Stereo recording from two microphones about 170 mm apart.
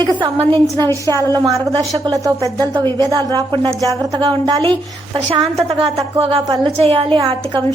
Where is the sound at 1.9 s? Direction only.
20° right (ahead or behind).